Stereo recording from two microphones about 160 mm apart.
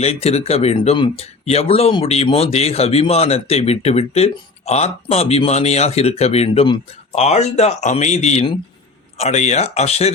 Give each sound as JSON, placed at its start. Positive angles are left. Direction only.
{"t": 0.0, "sound": "speech", "side_deg": 40}